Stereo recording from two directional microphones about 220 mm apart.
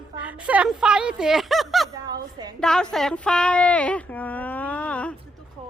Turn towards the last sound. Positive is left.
turn(degrees=5)  # may be behind; listen again after turning